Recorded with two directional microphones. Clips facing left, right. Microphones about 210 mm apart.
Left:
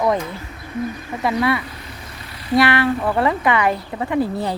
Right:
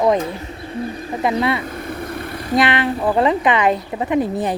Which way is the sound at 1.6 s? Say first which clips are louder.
Right 9 dB; 50° right (ahead or behind).